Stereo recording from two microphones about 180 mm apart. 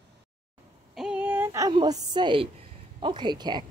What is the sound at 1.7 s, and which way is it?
A woman's voice, 25° right (ahead or behind).